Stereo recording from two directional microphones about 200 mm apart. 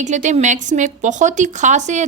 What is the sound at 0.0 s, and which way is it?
A woman's voice, 35° right (ahead or behind).